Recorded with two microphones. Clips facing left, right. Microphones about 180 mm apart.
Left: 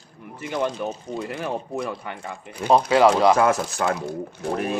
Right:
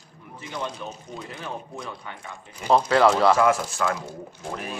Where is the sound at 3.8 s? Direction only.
65° left (ahead or behind).